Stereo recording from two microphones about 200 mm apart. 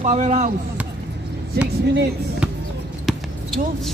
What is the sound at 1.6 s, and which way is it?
Speech, 55° right (ahead or behind).